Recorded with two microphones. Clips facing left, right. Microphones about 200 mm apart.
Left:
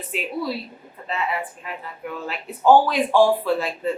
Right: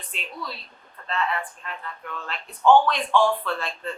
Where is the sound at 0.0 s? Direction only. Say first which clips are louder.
Left 10 dB; 5° left (ahead or behind).